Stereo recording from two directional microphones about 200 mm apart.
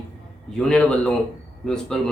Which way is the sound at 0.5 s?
5° left (ahead or behind).